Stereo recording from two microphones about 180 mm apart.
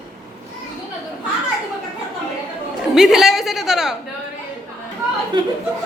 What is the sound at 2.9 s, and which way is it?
A woman's voice, 5° right (ahead or behind).